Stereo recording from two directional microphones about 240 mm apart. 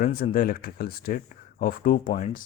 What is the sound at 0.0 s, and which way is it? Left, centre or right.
Speech, left.